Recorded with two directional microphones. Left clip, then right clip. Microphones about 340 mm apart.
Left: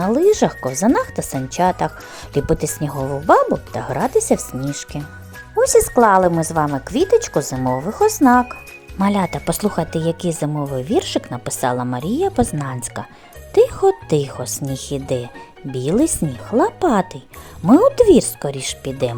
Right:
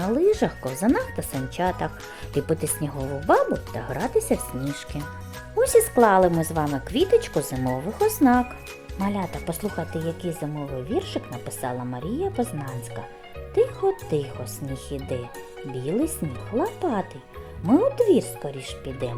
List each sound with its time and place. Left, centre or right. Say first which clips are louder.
0.0 s speech: left 7 dB; centre